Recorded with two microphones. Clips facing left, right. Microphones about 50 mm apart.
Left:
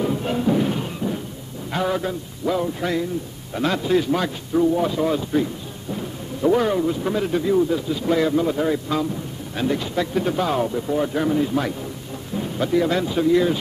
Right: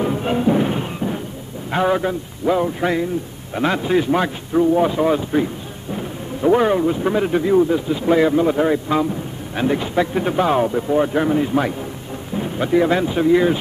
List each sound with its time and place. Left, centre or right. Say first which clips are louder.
0.0 s music: right 3 dB; right
1.7 s speech: right 5 dB; right